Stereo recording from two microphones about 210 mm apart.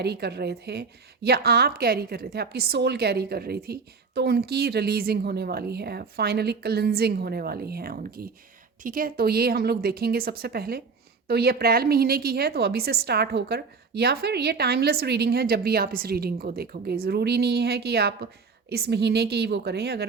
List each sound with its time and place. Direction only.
0.0 s a woman's voice: 50° right (ahead or behind)